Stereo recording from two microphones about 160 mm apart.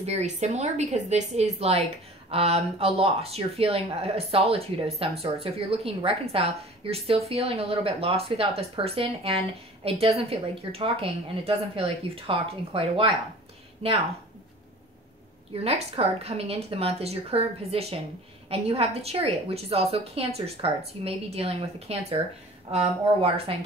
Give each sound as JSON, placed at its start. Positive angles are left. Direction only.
{"t": 0.0, "sound": "a woman's voice", "side_deg": -45}
{"t": 15.6, "sound": "speech", "side_deg": -40}